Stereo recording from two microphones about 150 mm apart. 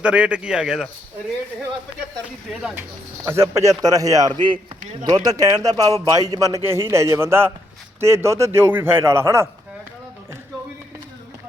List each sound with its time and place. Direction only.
0.0 s a man's voice: 5° right (ahead or behind)
2.5 s speech: 5° right (ahead or behind)
3.2 s a man's voice: 15° right (ahead or behind)